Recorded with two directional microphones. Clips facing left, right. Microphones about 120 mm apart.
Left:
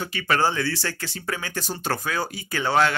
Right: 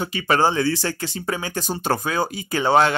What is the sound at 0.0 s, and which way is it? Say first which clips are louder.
Speech: right 4 dB; 20° right (ahead or behind).